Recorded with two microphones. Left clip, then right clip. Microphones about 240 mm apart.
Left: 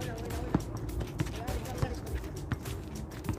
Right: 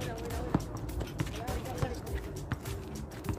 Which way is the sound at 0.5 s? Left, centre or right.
Centre.